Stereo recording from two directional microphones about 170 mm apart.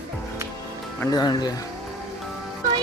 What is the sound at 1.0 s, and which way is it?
Speech, 25° left (ahead or behind).